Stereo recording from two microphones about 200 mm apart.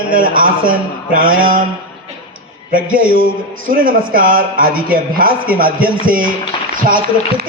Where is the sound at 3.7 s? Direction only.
45° right (ahead or behind).